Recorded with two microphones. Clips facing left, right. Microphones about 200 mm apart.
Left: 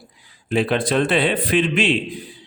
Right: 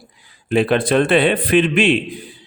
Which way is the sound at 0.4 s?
60° right (ahead or behind).